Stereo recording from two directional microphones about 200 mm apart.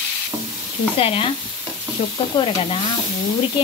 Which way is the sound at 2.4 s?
30° left (ahead or behind).